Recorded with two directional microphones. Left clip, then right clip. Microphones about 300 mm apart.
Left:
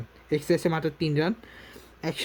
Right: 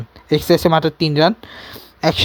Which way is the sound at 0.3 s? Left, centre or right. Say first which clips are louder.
Right 11 dB; centre.